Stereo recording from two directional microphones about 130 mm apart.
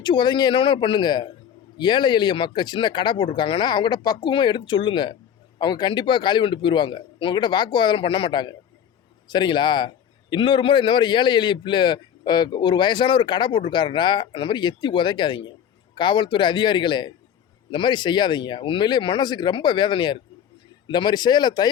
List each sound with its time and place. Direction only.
0.0 s a man's voice: 35° left (ahead or behind)